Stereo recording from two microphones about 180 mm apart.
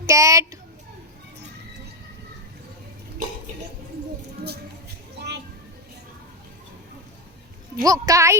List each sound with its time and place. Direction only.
0.0 s a child's voice: 15° right (ahead or behind)
7.8 s a woman's voice: 20° right (ahead or behind)